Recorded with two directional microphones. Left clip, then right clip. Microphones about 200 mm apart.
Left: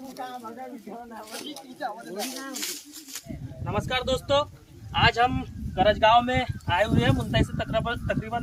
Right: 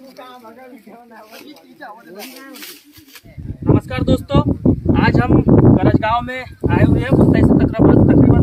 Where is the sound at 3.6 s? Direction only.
5° left (ahead or behind).